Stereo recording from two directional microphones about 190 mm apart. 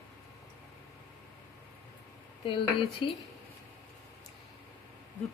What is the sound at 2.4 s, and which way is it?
Speech, 25° left (ahead or behind).